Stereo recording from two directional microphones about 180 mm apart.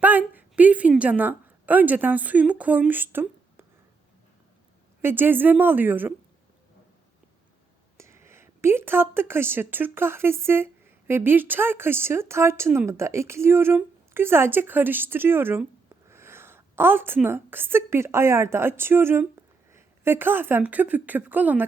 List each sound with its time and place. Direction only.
0.0 s a woman's voice: 10° right (ahead or behind)
5.0 s speech: 10° right (ahead or behind)
7.9 s speech: 15° right (ahead or behind)